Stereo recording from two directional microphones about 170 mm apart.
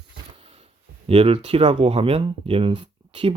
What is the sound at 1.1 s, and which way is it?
Speech, 35° right (ahead or behind).